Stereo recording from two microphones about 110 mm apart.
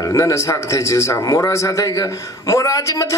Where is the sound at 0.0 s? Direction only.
30° left (ahead or behind).